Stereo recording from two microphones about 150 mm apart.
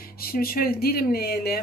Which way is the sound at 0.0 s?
85° left.